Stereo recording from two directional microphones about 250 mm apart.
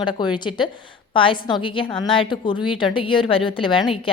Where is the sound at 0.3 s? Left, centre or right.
Centre.